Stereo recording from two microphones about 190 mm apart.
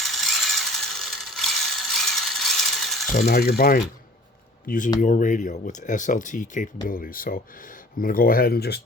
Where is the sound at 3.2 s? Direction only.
55° left (ahead or behind).